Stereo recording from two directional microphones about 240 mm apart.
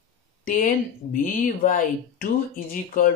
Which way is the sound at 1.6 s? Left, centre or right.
Left.